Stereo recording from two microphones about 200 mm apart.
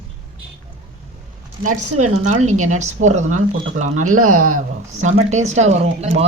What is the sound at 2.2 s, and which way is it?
Speech, 35° right (ahead or behind).